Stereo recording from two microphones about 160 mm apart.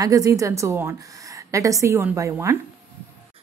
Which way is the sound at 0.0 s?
20° right (ahead or behind).